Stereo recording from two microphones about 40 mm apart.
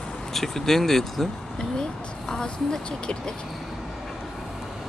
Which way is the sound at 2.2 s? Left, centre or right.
Centre.